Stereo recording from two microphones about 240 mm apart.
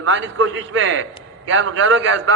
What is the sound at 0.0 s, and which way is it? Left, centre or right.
A man's voice, right.